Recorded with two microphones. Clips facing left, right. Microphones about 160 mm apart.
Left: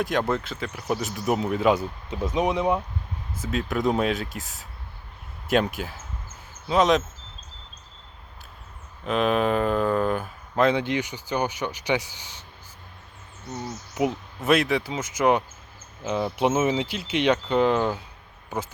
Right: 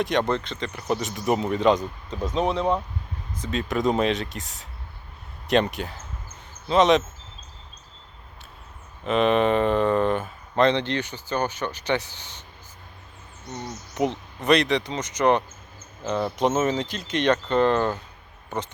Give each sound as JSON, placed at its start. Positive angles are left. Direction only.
{"t": 0.0, "sound": "speech", "side_deg": 0}
{"t": 9.0, "sound": "speech", "side_deg": 0}
{"t": 13.5, "sound": "speech", "side_deg": 5}